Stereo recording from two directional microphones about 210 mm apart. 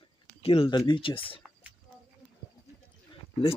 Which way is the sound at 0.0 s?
25° left (ahead or behind).